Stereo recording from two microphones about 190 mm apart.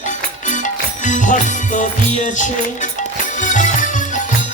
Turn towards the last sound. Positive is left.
turn(degrees=40)  # may be behind; listen again after turning